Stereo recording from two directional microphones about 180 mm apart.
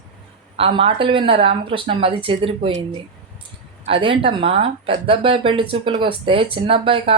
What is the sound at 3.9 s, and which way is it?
Speech, 30° right (ahead or behind).